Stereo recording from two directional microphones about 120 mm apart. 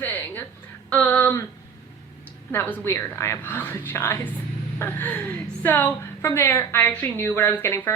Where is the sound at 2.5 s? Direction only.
20° left (ahead or behind).